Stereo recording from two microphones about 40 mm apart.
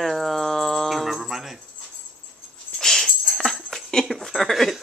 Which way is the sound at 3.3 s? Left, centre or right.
Centre.